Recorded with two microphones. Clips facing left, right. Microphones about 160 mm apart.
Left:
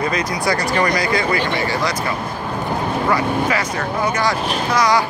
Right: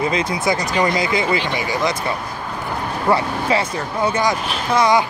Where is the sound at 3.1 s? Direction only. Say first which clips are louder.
Right 2 dB; 30° right (ahead or behind).